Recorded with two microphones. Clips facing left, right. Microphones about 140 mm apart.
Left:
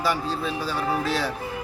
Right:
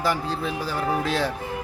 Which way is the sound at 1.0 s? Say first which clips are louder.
Right 1 dB; 20° right (ahead or behind).